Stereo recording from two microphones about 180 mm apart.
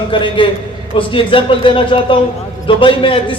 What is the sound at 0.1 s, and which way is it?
A man's voice, 30° left (ahead or behind).